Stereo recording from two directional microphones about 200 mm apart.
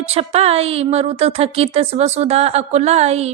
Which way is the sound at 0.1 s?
30° right (ahead or behind).